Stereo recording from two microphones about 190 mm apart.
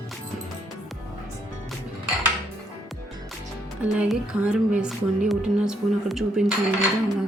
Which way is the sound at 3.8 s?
5° right (ahead or behind).